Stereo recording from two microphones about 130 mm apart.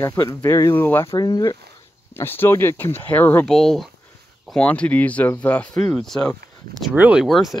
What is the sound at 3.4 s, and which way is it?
Speech, 5° left (ahead or behind).